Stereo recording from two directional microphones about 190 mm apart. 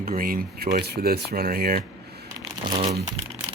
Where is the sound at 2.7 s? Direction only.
30° right (ahead or behind).